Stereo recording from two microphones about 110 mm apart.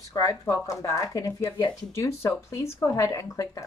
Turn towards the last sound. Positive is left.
turn(degrees=30)  # may be behind; listen again after turning